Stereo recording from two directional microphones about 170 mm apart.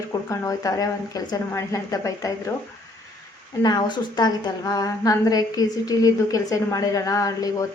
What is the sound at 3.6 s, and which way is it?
A woman's voice, 25° left (ahead or behind).